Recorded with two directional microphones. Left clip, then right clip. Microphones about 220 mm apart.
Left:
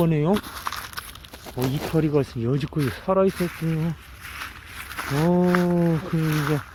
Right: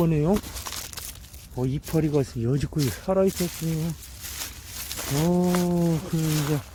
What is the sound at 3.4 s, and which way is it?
Speech, centre (ahead or behind).